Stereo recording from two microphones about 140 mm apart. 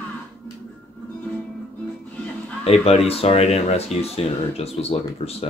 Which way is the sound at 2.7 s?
45° left (ahead or behind).